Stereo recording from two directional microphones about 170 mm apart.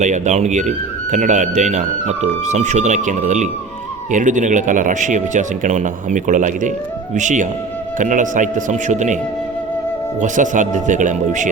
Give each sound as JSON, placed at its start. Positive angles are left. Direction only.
{"t": 0.0, "sound": "speech", "side_deg": -45}
{"t": 10.2, "sound": "speech", "side_deg": -50}